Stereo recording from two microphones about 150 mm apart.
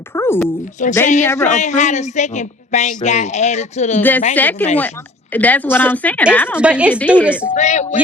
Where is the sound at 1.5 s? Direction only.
50° left (ahead or behind).